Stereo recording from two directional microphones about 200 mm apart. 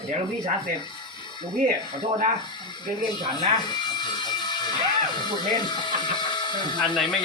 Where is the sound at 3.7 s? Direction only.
20° left (ahead or behind).